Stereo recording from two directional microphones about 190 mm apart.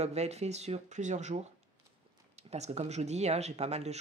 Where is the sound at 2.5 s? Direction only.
35° right (ahead or behind).